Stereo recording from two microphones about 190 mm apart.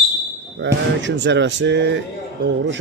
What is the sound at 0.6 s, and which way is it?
Speech, 70° right (ahead or behind).